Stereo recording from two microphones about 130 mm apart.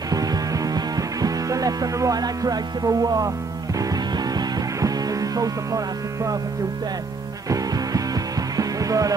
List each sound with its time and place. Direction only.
0.1 s music: 30° right (ahead or behind)
7.4 s music: 25° right (ahead or behind)